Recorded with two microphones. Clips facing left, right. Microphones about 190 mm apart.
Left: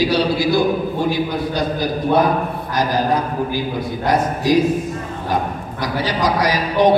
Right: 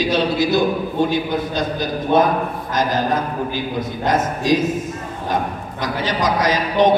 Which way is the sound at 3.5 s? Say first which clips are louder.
Left 1 dB; 20° right (ahead or behind).